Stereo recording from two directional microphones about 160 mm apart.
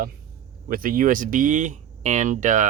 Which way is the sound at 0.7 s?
60° right (ahead or behind).